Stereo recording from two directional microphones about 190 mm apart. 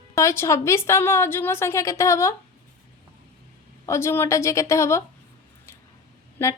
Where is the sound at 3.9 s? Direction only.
15° left (ahead or behind).